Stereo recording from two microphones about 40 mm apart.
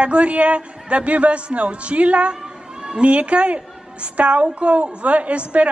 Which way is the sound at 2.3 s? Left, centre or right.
Right.